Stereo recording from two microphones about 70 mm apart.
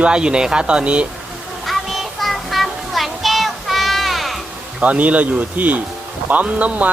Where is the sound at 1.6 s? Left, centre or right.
Centre.